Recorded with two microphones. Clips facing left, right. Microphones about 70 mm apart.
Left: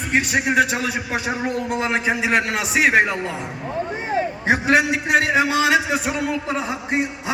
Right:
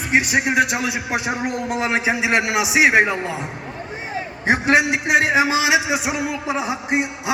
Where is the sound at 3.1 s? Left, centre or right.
Centre.